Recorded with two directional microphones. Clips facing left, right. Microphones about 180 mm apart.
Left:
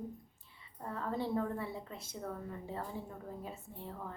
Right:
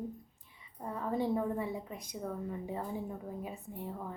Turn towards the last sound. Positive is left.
turn(degrees=-15)  # may be behind; listen again after turning